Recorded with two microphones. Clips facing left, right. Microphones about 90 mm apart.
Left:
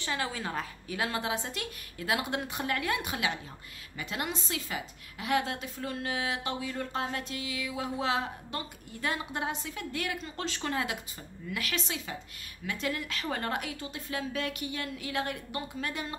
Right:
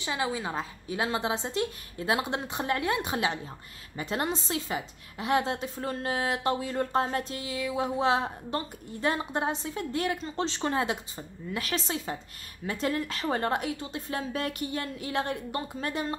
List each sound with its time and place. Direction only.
0.0 s a woman's voice: 20° right (ahead or behind); by 16.2 s 35° right (ahead or behind)